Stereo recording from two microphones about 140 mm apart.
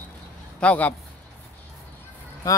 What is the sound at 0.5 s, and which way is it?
Speech, 10° left (ahead or behind).